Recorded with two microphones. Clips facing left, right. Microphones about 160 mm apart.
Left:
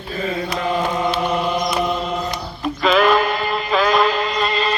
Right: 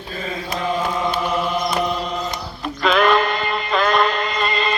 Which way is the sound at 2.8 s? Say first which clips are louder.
Left 1 dB; centre (ahead or behind).